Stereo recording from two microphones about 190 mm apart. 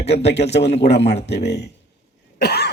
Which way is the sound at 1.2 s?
60° left (ahead or behind).